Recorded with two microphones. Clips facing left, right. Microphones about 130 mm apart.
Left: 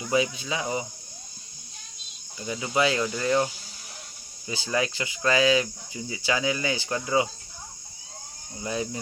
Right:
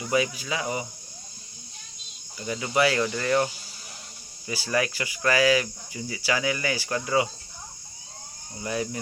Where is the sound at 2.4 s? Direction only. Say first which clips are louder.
Right 1 dB; 15° left (ahead or behind).